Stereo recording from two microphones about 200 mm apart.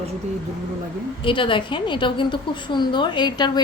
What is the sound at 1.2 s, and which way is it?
A woman's voice, 25° left (ahead or behind).